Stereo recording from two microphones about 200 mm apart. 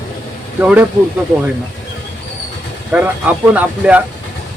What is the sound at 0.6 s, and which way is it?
Speech, 10° right (ahead or behind).